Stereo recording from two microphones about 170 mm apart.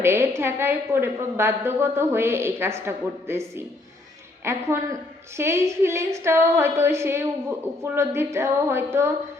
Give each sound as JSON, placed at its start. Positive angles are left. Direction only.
{"t": 0.0, "sound": "a woman's voice", "side_deg": -15}